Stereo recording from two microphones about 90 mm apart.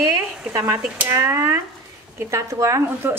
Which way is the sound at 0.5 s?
35° right (ahead or behind).